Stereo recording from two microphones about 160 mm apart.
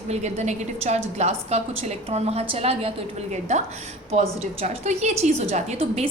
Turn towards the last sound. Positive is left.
turn(degrees=-40)  # may be behind; listen again after turning